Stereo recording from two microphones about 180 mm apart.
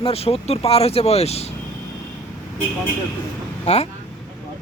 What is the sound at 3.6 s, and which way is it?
Speech, 35° left (ahead or behind).